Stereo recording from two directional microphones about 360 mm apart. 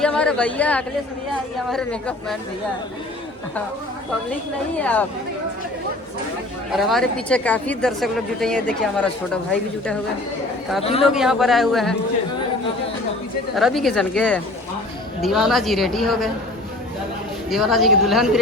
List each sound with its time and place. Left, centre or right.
0.0 s a woman's voice: centre
4.8 s a woman's voice: centre
6.7 s a woman's voice: centre
10.8 s a man's voice: centre
11.1 s a woman's voice: centre
13.6 s a woman's voice: centre
17.5 s a woman's voice: centre